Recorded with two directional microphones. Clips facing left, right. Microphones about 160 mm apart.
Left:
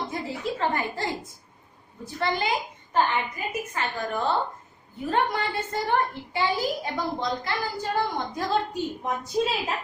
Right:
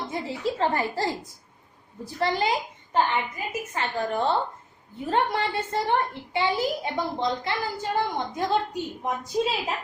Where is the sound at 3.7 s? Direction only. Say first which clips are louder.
Right 4 dB; 30° right (ahead or behind).